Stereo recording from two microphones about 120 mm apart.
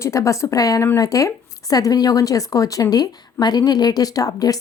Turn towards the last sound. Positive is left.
turn(degrees=30)  # may be behind; listen again after turning